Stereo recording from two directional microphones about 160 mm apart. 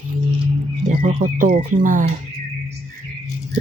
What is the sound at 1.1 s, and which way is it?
Speech, 40° right (ahead or behind).